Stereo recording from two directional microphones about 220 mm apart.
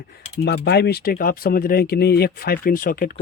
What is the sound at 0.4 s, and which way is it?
Speech, 45° left (ahead or behind).